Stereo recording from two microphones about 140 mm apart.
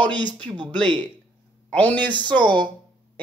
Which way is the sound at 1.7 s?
10° left (ahead or behind).